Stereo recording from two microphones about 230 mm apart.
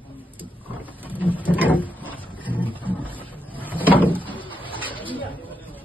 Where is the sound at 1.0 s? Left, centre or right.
Centre.